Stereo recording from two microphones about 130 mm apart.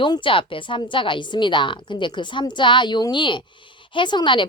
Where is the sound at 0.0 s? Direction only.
40° left (ahead or behind).